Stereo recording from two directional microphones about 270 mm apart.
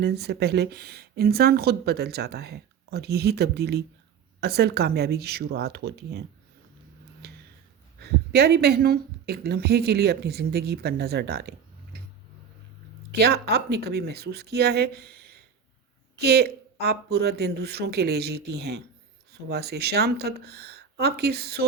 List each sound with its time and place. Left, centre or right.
0.0 s speech: right
7.2 s a sound: right
7.9 s speech: right
13.1 s speech: right